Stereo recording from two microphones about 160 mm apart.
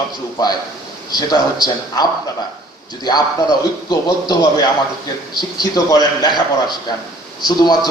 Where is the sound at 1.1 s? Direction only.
25° left (ahead or behind).